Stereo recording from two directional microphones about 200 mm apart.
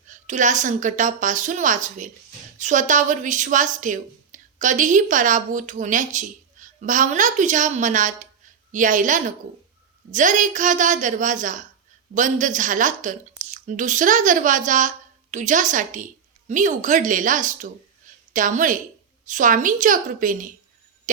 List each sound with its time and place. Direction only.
0.1 s a woman's voice: 40° right (ahead or behind)